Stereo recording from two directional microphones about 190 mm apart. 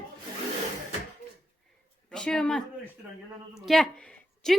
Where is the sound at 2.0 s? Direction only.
5° left (ahead or behind).